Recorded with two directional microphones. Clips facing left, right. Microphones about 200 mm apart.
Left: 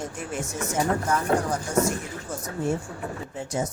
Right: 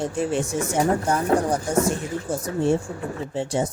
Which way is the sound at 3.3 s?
30° right (ahead or behind).